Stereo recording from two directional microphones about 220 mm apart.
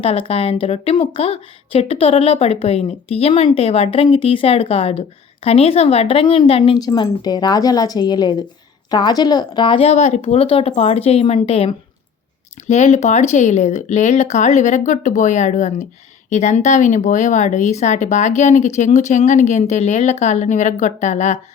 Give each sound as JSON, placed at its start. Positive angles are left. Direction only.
{"t": 0.0, "sound": "speech", "side_deg": 25}